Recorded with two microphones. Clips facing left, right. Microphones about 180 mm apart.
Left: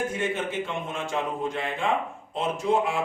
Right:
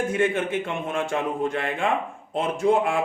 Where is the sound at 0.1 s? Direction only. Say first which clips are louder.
Right 5 dB; 60° right (ahead or behind).